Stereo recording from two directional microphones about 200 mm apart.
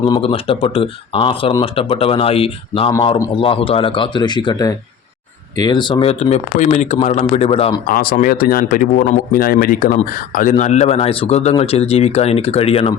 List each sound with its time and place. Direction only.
0.0 s speech: 25° left (ahead or behind)
7.9 s speech: 40° left (ahead or behind)